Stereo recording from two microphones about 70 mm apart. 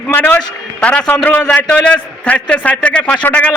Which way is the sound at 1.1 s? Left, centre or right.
Left.